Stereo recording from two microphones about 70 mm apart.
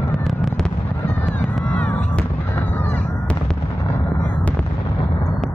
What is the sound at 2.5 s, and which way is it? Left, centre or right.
Fireworks, left.